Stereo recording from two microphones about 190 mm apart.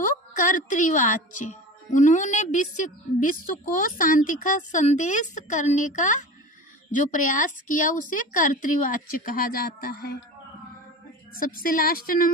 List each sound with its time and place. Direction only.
0.0 s a woman's voice: 45° left (ahead or behind)
11.3 s a woman's voice: 50° left (ahead or behind)